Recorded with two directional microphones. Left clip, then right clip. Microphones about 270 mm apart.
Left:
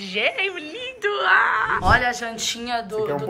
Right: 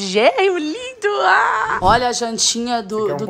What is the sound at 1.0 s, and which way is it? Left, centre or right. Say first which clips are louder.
A woman's voice: right 4 dB; centre.